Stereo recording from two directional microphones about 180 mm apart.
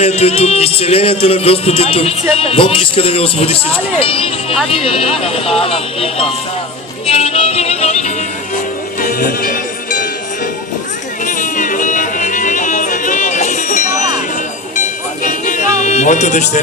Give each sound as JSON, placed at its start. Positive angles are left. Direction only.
{"t": 0.0, "sound": "a man's voice", "side_deg": 35}
{"t": 4.7, "sound": "a man's voice", "side_deg": 30}
{"t": 9.0, "sound": "music", "side_deg": 50}
{"t": 11.3, "sound": "music", "side_deg": 45}
{"t": 15.2, "sound": "music", "side_deg": 45}